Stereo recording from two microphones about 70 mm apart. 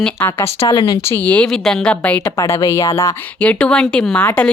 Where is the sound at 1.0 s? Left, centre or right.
Left.